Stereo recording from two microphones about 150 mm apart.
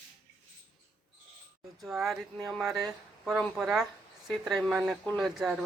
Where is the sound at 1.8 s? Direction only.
Centre (ahead or behind).